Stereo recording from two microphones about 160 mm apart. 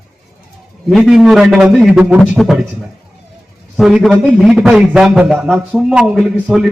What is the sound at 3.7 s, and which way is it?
A man's voice, centre (ahead or behind).